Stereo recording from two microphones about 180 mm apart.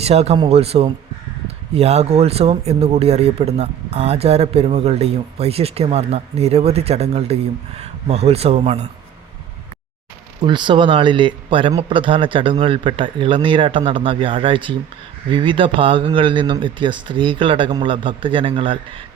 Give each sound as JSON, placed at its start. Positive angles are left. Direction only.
{"t": 0.0, "sound": "speech", "side_deg": -35}
{"t": 10.4, "sound": "speech", "side_deg": -25}